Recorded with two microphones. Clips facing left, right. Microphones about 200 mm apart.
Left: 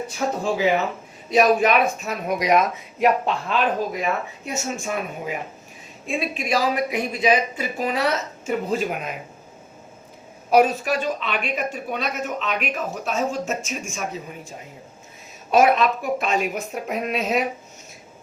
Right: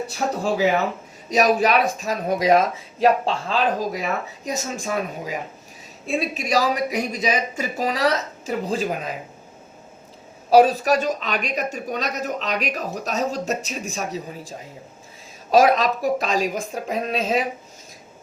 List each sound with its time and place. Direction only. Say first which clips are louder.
0.4 s a woman's voice: right 1 dB; 40° right (ahead or behind)
10.5 s a woman's voice: right 3 dB; 35° right (ahead or behind)
15.5 s a woman's voice: right 1 dB; 35° right (ahead or behind)